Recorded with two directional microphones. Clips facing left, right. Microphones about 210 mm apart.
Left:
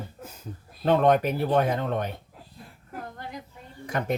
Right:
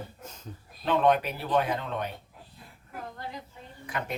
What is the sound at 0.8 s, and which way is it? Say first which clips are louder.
Speech: left 4 dB; 45° left (ahead or behind).